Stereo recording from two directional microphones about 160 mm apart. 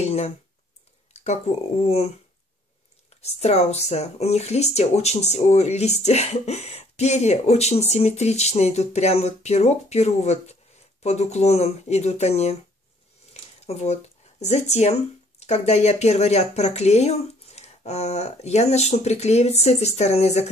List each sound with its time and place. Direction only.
0.0 s a sound: 45° left (ahead or behind)
1.1 s speech: 45° left (ahead or behind)
3.2 s speech: 40° left (ahead or behind)